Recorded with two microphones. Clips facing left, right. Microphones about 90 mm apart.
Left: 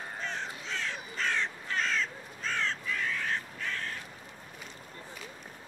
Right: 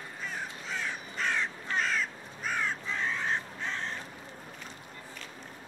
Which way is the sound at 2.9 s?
25° right (ahead or behind).